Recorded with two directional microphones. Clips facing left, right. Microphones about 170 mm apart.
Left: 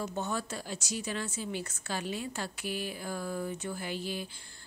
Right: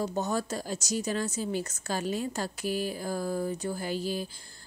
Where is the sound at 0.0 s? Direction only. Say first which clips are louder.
Right 5 dB; 40° right (ahead or behind).